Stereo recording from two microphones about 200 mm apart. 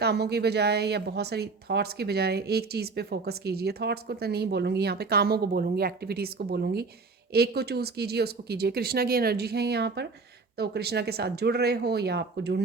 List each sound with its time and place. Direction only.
0.0 s speech: 55° right (ahead or behind)